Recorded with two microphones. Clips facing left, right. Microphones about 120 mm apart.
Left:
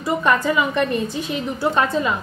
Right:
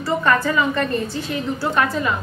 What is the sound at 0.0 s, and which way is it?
A woman's voice, 15° left (ahead or behind).